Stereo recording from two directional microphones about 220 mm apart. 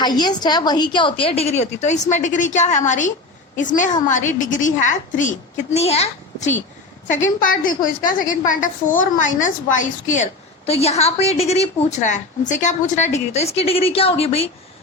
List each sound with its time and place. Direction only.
0.0 s a woman's voice: 20° left (ahead or behind)